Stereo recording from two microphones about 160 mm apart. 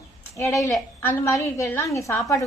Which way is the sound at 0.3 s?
20° left (ahead or behind).